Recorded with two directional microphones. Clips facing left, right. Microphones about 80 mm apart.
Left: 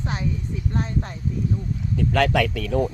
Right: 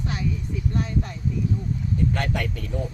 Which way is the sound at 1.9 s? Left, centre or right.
Left.